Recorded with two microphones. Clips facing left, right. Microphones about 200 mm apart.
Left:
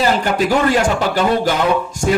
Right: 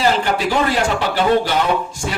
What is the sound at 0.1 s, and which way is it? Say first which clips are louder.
A man's voice: left 2 dB; 45° left (ahead or behind).